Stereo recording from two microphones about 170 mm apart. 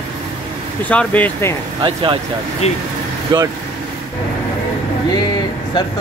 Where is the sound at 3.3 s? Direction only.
25° right (ahead or behind).